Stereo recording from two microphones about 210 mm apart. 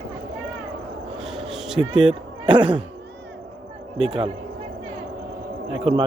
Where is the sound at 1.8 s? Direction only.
20° right (ahead or behind).